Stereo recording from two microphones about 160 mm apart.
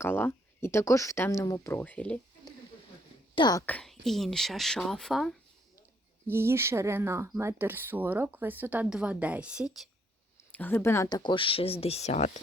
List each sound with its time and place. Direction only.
0.0 s speech: 15° left (ahead or behind)
3.3 s speech: 25° left (ahead or behind)
3.7 s speech: 5° left (ahead or behind)
6.2 s speech: 15° right (ahead or behind)
10.3 s speech: 10° left (ahead or behind); by 12.4 s 45° left (ahead or behind)